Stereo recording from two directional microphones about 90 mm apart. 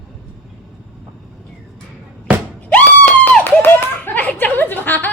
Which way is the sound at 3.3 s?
25° left (ahead or behind).